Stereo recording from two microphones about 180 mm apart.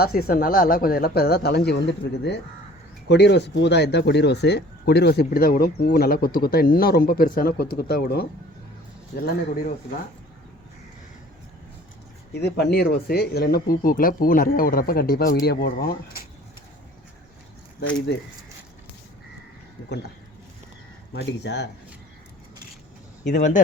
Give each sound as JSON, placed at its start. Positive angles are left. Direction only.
{"t": 0.0, "sound": "speech", "side_deg": 55}
{"t": 12.3, "sound": "speech", "side_deg": 65}
{"t": 21.4, "sound": "speech", "side_deg": 70}
{"t": 23.3, "sound": "speech", "side_deg": 45}